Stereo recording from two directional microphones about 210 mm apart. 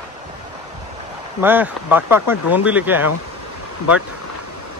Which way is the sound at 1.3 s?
10° right (ahead or behind).